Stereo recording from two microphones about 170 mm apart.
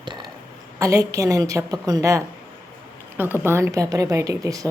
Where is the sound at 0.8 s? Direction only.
15° right (ahead or behind).